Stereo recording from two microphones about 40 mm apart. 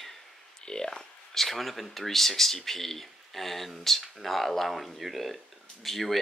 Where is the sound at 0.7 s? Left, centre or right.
Centre.